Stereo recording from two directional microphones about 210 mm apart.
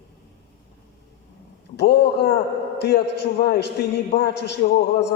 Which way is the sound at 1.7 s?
55° left (ahead or behind).